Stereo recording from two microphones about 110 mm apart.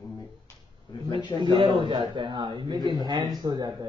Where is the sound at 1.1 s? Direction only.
50° right (ahead or behind).